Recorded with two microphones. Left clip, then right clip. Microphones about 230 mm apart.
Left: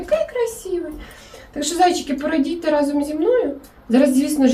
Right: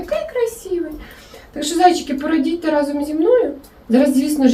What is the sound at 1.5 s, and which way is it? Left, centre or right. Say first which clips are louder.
Speech: right 3 dB; centre.